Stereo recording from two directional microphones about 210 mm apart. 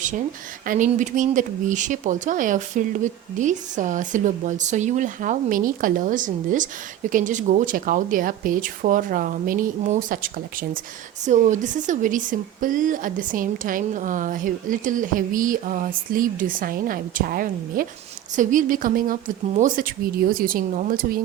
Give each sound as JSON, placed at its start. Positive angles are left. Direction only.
{"t": 0.7, "sound": "speech", "side_deg": -40}